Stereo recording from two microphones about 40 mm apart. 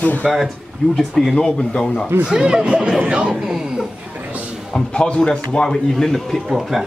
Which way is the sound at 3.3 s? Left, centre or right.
Centre.